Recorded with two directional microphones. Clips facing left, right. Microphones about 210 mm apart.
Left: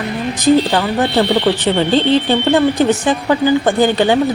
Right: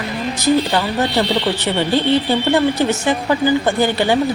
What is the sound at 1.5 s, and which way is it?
Speech, 20° left (ahead or behind).